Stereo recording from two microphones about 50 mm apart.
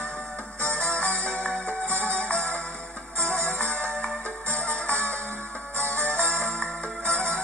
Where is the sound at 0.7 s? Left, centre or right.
Left.